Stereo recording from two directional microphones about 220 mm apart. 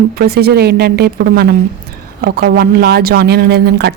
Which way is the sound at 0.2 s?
45° right (ahead or behind).